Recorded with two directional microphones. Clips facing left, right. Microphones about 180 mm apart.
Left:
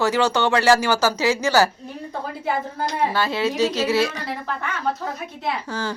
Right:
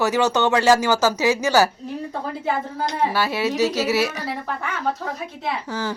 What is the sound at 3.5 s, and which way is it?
Speech, 15° left (ahead or behind).